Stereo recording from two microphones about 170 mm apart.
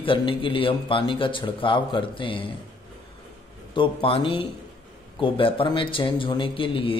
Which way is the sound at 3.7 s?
30° left (ahead or behind).